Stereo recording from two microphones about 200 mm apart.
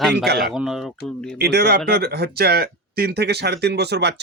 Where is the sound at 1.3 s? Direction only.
55° right (ahead or behind).